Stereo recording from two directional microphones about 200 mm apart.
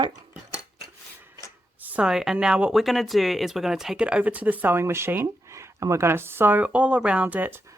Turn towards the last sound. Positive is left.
turn(degrees=-10)  # may be behind; listen again after turning